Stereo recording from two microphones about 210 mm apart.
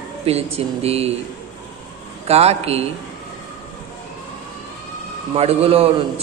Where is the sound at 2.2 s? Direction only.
30° right (ahead or behind).